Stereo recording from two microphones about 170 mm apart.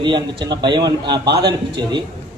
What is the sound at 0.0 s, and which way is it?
A man's voice, 25° right (ahead or behind).